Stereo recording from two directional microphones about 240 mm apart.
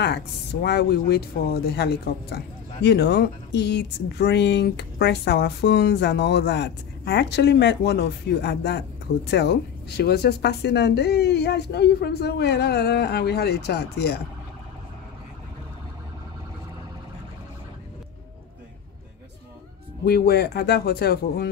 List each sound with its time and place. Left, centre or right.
0.0 s speech: left
20.1 s speech: left